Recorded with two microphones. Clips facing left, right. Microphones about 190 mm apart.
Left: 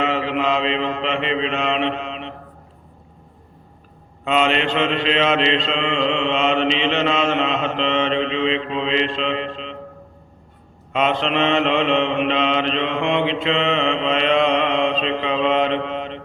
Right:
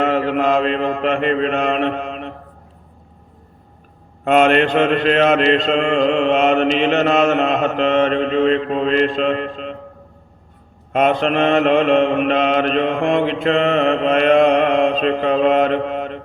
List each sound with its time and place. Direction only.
0.0 s mantra: 50° right (ahead or behind)
4.2 s mantra: 50° right (ahead or behind)
10.9 s mantra: 50° right (ahead or behind)